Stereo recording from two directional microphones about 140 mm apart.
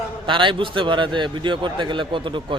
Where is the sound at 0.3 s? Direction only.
35° right (ahead or behind).